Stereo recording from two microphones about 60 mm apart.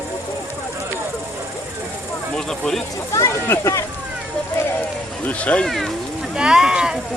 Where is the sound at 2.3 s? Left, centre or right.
Centre.